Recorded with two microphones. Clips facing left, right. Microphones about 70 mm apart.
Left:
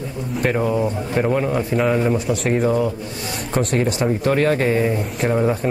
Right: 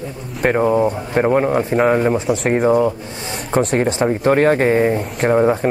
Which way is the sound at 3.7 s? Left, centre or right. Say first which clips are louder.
Right 3 dB; right.